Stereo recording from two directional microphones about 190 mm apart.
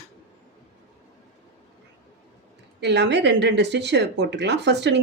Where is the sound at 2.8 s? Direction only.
65° right (ahead or behind).